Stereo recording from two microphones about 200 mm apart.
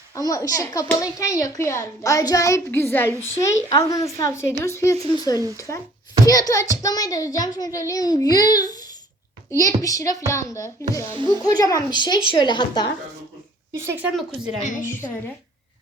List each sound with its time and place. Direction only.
0.2 s a child's voice: 15° left (ahead or behind)
13.7 s speech: 10° right (ahead or behind)